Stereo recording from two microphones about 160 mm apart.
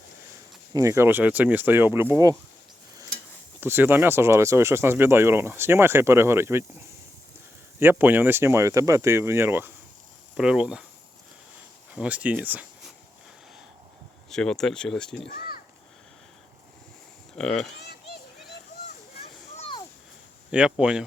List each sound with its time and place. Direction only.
0.7 s speech: 20° right (ahead or behind)
3.6 s speech: 15° right (ahead or behind)
11.9 s speech: 10° right (ahead or behind)
14.3 s speech: 5° left (ahead or behind)
15.3 s a sound: 65° left (ahead or behind)
17.3 s speech: 5° left (ahead or behind)
19.5 s a sound: 35° left (ahead or behind)
20.5 s speech: 5° right (ahead or behind)